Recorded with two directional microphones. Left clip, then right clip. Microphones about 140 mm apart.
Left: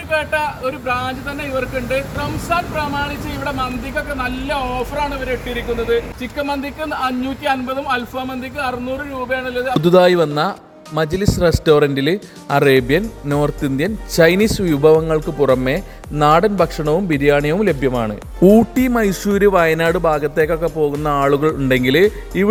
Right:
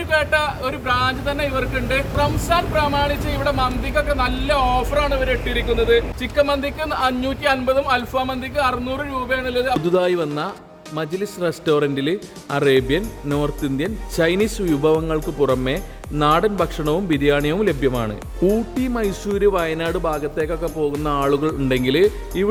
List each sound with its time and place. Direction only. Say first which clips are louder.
0.6 s speech: even; 25° right (ahead or behind)
9.8 s speech: left 7 dB; 60° left (ahead or behind)
16.8 s speech: left 3 dB; 35° left (ahead or behind)
18.4 s speech: left 8 dB; 75° left (ahead or behind)
18.9 s speech: left 5 dB; 55° left (ahead or behind)